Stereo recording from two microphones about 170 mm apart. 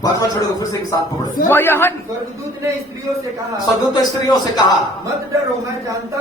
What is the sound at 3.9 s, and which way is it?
Music, 25° left (ahead or behind).